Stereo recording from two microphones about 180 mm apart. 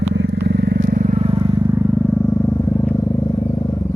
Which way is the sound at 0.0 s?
75° right (ahead or behind).